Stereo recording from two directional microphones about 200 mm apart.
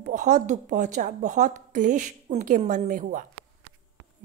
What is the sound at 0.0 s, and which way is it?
A woman's voice, 40° right (ahead or behind).